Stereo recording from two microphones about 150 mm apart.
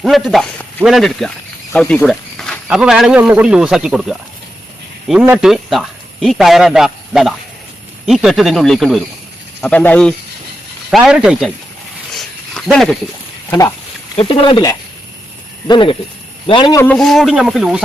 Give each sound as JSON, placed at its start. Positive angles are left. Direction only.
{"t": 0.0, "sound": "speech", "side_deg": 0}
{"t": 5.2, "sound": "speech", "side_deg": -5}
{"t": 10.9, "sound": "speech", "side_deg": -5}
{"t": 12.1, "sound": "a sound", "side_deg": 5}
{"t": 13.5, "sound": "speech", "side_deg": 20}
{"t": 14.2, "sound": "speech", "side_deg": 40}
{"t": 16.8, "sound": "speech", "side_deg": 5}